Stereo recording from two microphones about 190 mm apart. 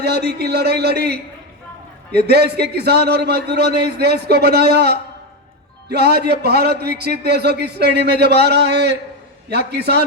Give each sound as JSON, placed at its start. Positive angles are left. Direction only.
{"t": 0.0, "sound": "a man's voice", "side_deg": -60}